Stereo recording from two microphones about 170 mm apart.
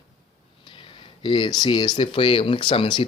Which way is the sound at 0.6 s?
30° left (ahead or behind).